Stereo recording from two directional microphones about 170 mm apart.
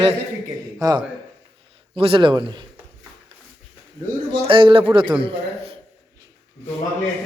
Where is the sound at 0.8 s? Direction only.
20° right (ahead or behind).